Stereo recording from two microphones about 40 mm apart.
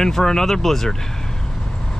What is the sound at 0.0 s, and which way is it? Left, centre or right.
Speech, centre.